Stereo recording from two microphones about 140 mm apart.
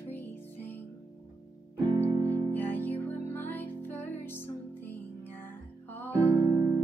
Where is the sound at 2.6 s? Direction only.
15° left (ahead or behind).